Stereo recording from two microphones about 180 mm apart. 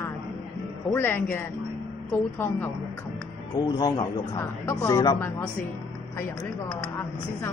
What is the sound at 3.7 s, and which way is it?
Speech, 20° left (ahead or behind).